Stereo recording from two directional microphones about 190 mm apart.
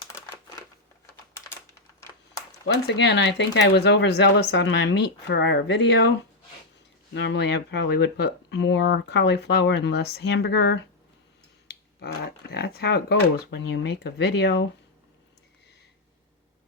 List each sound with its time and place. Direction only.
2.6 s speech: 65° left (ahead or behind)
7.1 s speech: 65° left (ahead or behind)
11.9 s speech: 60° left (ahead or behind)